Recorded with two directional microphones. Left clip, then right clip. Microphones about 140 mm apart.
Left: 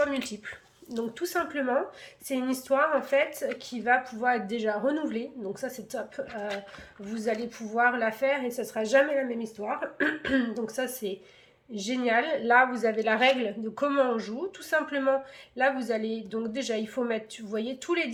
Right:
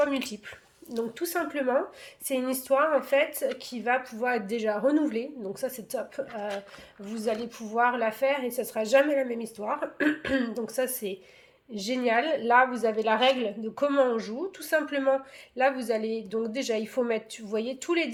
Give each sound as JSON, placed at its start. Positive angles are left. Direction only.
{"t": 0.0, "sound": "a woman's voice", "side_deg": -25}